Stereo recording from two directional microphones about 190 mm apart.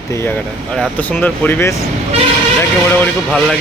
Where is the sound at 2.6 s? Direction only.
10° left (ahead or behind).